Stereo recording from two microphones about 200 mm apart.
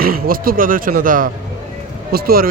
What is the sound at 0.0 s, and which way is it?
Speech, 45° right (ahead or behind).